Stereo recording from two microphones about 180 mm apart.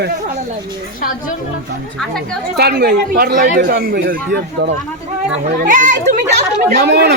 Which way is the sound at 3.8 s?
75° right (ahead or behind).